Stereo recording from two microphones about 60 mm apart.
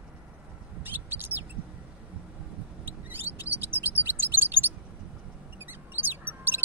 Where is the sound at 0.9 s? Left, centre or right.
Right.